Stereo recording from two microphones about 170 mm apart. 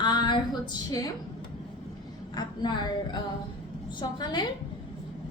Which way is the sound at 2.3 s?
25° left (ahead or behind).